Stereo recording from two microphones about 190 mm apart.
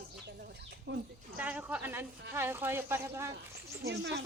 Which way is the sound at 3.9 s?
65° right (ahead or behind).